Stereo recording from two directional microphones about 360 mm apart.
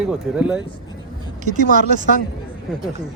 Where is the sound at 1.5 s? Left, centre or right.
Right.